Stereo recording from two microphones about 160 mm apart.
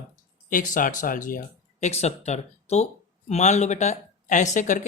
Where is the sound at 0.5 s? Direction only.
55° left (ahead or behind).